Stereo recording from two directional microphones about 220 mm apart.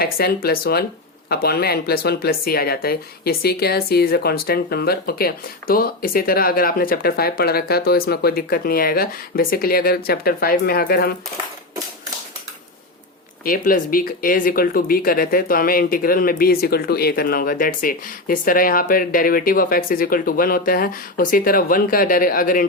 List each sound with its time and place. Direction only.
0.0 s speech: 45° left (ahead or behind)
13.4 s speech: 40° left (ahead or behind)